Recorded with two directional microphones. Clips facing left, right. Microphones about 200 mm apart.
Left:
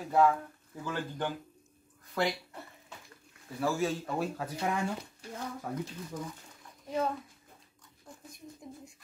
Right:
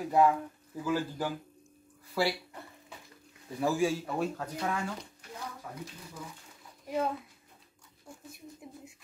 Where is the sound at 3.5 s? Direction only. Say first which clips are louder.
Right 2 dB; 15° right (ahead or behind).